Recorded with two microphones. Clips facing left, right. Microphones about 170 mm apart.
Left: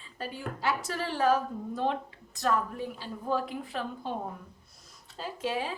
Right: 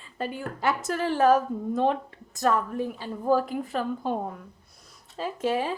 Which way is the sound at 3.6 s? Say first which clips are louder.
Right 7 dB; 45° right (ahead or behind).